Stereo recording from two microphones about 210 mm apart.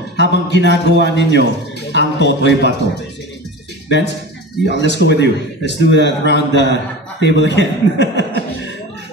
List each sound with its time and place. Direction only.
0.1 s a man's voice: 55° left (ahead or behind)
4.6 s speech: 55° left (ahead or behind)